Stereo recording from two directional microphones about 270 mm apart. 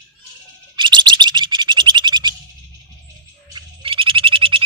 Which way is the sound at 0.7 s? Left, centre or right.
Centre.